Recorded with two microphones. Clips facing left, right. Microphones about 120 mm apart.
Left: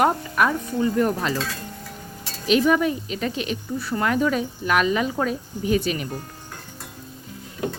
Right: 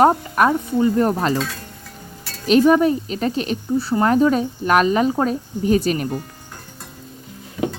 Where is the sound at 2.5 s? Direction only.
40° right (ahead or behind).